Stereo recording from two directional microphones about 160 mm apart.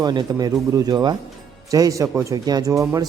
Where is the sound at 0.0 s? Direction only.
25° right (ahead or behind).